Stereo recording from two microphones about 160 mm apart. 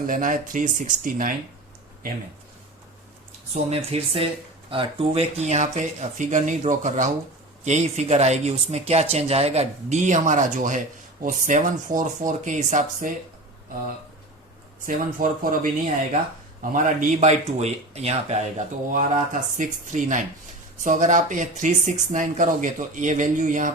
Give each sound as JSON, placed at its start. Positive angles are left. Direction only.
{"t": 0.1, "sound": "speech", "side_deg": -55}
{"t": 3.5, "sound": "speech", "side_deg": -40}
{"t": 14.8, "sound": "speech", "side_deg": -60}
{"t": 16.7, "sound": "speech", "side_deg": -55}